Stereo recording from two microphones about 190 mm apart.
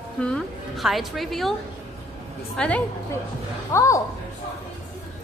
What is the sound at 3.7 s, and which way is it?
Speech, 15° left (ahead or behind).